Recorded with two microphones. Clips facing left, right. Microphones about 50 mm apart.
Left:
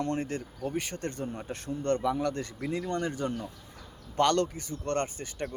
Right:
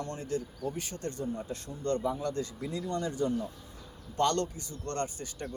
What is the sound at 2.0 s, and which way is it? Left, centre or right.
Speech, left.